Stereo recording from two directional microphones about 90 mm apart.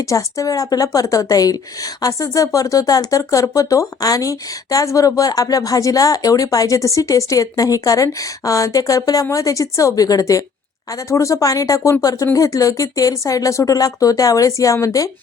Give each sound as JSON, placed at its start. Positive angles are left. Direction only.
{"t": 0.0, "sound": "speech", "side_deg": 35}